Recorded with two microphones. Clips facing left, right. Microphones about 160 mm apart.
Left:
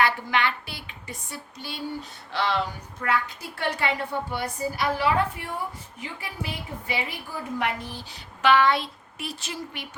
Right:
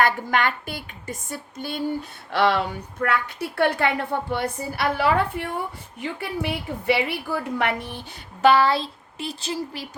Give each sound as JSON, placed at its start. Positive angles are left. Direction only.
{"t": 0.0, "sound": "speech", "side_deg": -45}
{"t": 2.3, "sound": "a woman's voice", "side_deg": -60}
{"t": 8.4, "sound": "speech", "side_deg": -40}